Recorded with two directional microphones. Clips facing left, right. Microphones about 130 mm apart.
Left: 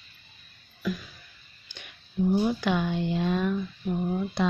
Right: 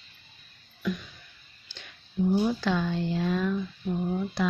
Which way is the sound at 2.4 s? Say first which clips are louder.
Left 1 dB; 15° left (ahead or behind).